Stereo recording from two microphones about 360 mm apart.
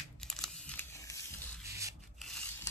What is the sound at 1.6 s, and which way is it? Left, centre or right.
Rub, centre.